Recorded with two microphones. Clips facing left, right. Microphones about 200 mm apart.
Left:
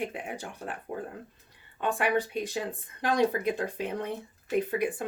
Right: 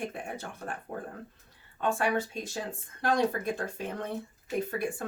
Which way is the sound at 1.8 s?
15° left (ahead or behind).